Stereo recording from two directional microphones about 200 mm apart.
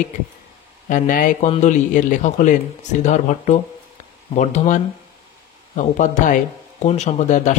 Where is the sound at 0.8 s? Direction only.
40° left (ahead or behind).